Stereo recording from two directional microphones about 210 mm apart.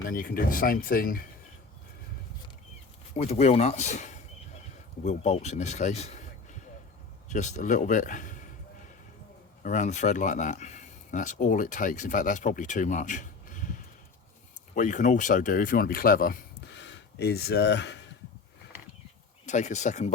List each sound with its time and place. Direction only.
0.1 s speech: 45° left (ahead or behind)
3.2 s speech: 30° left (ahead or behind)
9.6 s speech: 35° left (ahead or behind)
14.8 s speech: 35° left (ahead or behind); by 18.0 s 55° left (ahead or behind)
19.5 s speech: 35° left (ahead or behind)